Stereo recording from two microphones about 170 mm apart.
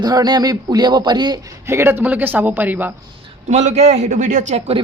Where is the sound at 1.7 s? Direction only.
15° right (ahead or behind).